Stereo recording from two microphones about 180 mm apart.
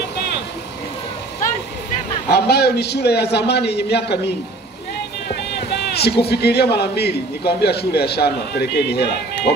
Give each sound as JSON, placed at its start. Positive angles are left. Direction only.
{"t": 2.2, "sound": "a man's voice", "side_deg": 65}
{"t": 5.3, "sound": "speech", "side_deg": 65}